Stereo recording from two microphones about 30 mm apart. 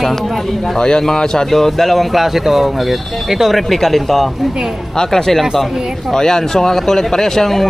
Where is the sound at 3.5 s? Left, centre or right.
Centre.